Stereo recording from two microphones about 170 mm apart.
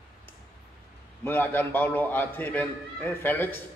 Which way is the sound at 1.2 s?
10° left (ahead or behind).